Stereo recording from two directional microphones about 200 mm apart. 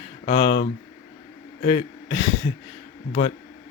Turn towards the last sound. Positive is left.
turn(degrees=35)  # may be behind; listen again after turning